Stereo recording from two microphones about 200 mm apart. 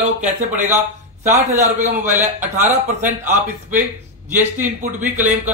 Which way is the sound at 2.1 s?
10° right (ahead or behind).